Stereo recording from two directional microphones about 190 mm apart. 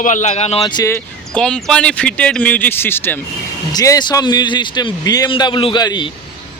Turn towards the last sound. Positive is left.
turn(degrees=25)  # may be behind; listen again after turning